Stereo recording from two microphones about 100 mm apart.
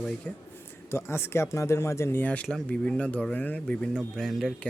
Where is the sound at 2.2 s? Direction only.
10° left (ahead or behind).